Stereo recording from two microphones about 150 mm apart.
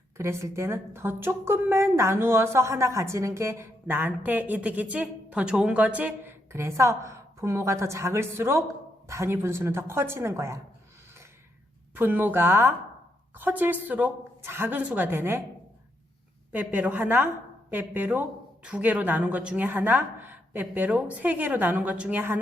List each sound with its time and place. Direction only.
0.2 s a woman's voice: 20° right (ahead or behind)
11.9 s a woman's voice: 15° right (ahead or behind)
16.5 s a woman's voice: 10° right (ahead or behind)